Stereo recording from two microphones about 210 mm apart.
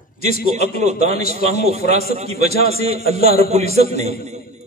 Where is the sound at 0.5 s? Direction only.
30° right (ahead or behind).